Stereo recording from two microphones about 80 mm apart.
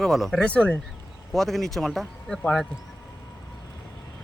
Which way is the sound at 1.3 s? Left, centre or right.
Centre.